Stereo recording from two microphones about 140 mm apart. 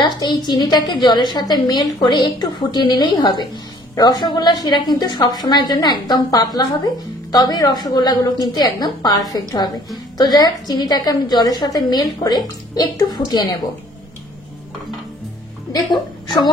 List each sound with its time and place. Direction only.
0.0 s a woman's voice: 30° left (ahead or behind)